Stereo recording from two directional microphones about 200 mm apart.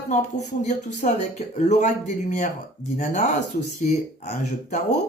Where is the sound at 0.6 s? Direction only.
35° left (ahead or behind).